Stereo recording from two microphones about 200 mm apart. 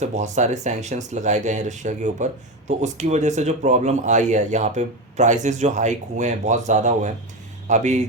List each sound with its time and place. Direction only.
0.0 s speech: 35° right (ahead or behind)